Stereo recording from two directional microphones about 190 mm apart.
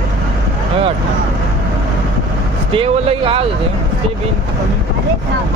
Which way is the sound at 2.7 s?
30° right (ahead or behind).